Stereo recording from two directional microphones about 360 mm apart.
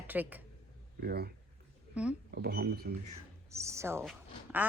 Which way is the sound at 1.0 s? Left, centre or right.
Right.